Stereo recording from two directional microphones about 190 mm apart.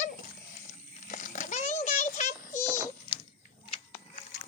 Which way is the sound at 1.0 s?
40° left (ahead or behind).